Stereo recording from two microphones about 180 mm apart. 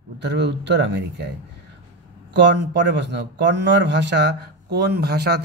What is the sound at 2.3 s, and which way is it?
Speech, 80° right.